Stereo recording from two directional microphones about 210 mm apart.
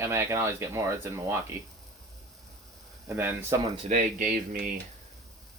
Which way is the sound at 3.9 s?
40° right (ahead or behind).